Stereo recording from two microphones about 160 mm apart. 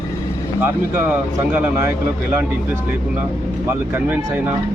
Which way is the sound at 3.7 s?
15° right (ahead or behind).